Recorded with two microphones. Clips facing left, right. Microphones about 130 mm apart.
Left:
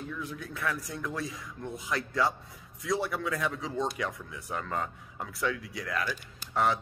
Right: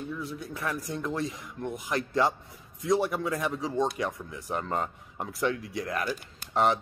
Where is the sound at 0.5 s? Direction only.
20° right (ahead or behind).